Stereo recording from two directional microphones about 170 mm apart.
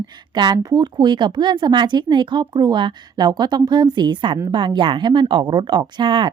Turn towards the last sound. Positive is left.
turn(degrees=-30)  # may be behind; listen again after turning